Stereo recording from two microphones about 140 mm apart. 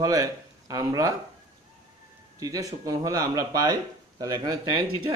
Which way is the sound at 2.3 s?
25° right (ahead or behind).